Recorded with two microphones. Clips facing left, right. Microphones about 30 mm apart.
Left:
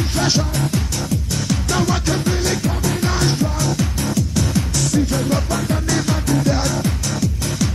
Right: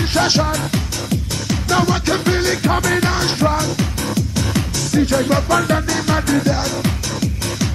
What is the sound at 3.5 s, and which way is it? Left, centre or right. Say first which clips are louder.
Music: right 1 dB; right.